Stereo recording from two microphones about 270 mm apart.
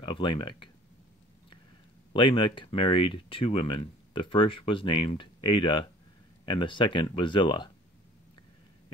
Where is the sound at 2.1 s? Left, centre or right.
Centre.